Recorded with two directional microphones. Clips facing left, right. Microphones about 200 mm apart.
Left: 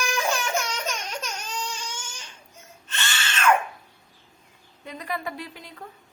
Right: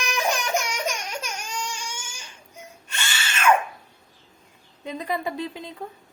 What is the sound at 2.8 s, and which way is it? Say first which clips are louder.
Cat: left 1 dB; 10° right (ahead or behind).